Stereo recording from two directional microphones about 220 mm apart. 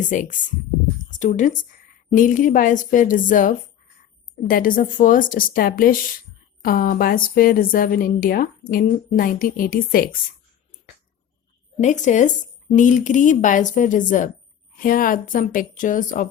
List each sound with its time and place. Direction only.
0.0 s a woman's voice: 35° left (ahead or behind)
11.8 s a woman's voice: 35° left (ahead or behind)